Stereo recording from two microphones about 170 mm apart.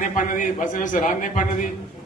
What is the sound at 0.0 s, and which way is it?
A man's voice, 50° left (ahead or behind).